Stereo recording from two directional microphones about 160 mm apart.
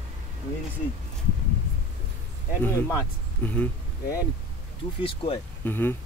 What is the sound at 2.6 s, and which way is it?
Speech, 15° left (ahead or behind).